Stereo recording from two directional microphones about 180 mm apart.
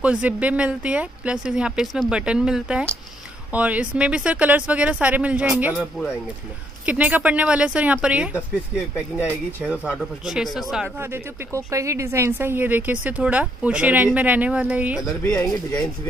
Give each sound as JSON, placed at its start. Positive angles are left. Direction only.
{"t": 0.0, "sound": "speech", "side_deg": -5}
{"t": 6.9, "sound": "speech", "side_deg": -10}
{"t": 9.7, "sound": "speech", "side_deg": -5}
{"t": 11.0, "sound": "speech", "side_deg": -15}
{"t": 15.0, "sound": "speech", "side_deg": 20}